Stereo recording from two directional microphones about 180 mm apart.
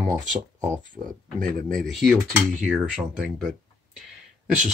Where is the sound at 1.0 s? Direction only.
30° right (ahead or behind).